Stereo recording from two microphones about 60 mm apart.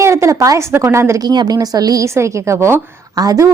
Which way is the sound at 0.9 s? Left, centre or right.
Right.